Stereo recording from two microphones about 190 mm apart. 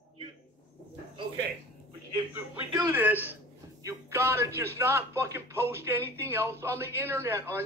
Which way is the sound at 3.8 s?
15° right (ahead or behind).